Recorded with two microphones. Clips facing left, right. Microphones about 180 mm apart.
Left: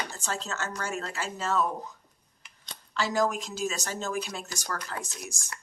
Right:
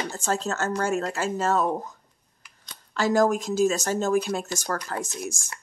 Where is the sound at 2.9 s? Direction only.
45° right (ahead or behind).